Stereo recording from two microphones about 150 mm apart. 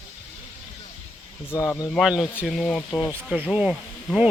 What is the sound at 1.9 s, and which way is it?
Speech, centre (ahead or behind).